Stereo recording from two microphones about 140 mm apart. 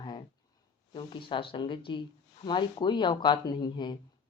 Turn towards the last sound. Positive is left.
turn(degrees=30)  # may be behind; listen again after turning